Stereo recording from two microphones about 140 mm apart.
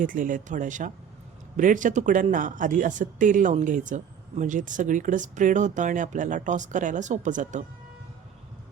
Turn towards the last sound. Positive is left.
turn(degrees=-60)  # may be behind; listen again after turning